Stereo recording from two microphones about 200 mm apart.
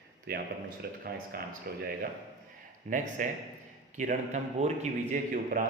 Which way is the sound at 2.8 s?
35° right (ahead or behind).